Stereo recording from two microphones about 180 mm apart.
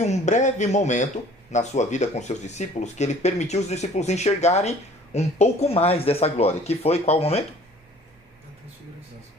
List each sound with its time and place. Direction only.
0.0 s speech: 40° left (ahead or behind)